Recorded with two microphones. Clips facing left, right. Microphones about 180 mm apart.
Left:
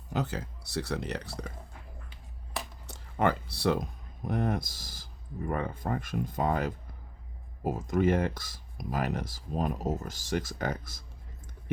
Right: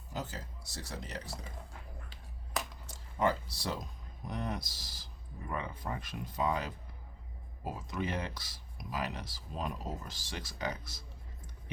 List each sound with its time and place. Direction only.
0.1 s speech: 65° left (ahead or behind)
2.8 s speech: 65° left (ahead or behind)